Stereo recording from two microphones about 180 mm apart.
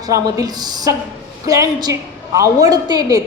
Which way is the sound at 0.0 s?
20° right (ahead or behind).